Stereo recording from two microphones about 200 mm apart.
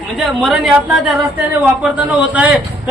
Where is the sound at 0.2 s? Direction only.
Centre (ahead or behind).